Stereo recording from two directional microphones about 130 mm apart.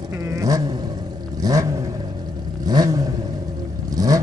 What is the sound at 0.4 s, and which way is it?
Vehicle, 25° right (ahead or behind).